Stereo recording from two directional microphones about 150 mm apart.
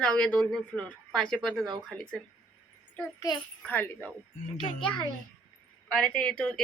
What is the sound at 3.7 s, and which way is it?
Speech, 10° left (ahead or behind).